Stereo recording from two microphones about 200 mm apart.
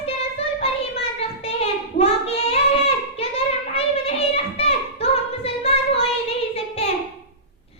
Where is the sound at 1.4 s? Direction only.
30° left (ahead or behind).